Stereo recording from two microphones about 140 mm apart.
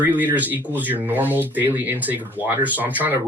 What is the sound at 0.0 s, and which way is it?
Speech, 10° right (ahead or behind).